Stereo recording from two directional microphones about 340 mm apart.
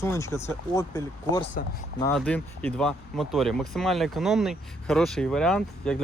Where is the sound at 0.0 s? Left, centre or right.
Centre.